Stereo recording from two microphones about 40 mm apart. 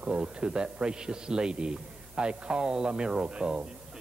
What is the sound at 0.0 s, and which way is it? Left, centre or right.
Speech, right.